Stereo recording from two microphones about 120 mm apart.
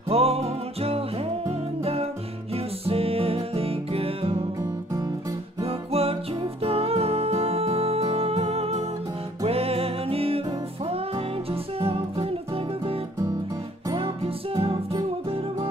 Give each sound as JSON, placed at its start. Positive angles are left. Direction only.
{"t": 0.1, "sound": "music", "side_deg": -55}
{"t": 2.5, "sound": "music", "side_deg": -55}
{"t": 5.6, "sound": "music", "side_deg": -55}
{"t": 11.8, "sound": "music", "side_deg": -55}
{"t": 13.9, "sound": "music", "side_deg": -50}